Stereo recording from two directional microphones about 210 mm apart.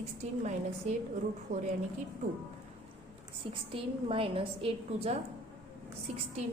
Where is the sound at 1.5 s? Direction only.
35° right (ahead or behind).